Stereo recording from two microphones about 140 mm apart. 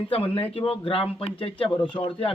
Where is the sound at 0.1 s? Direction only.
40° left (ahead or behind).